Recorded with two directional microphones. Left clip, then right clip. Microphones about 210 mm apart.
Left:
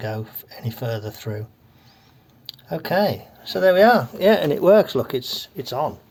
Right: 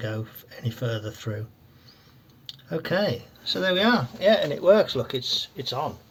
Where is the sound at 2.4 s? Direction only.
40° left (ahead or behind).